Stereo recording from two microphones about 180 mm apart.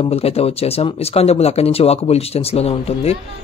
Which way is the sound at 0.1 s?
35° left (ahead or behind).